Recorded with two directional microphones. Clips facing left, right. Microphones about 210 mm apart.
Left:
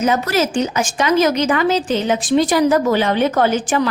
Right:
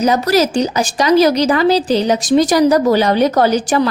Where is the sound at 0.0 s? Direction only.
35° right (ahead or behind).